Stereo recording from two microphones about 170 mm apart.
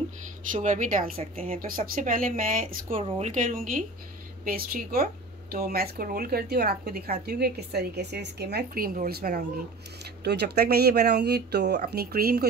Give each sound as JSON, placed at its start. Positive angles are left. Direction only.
{"t": 0.5, "sound": "speech", "side_deg": -50}
{"t": 3.0, "sound": "speech", "side_deg": -45}